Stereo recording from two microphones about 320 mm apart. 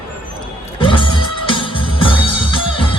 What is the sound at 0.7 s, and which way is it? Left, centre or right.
Music, centre.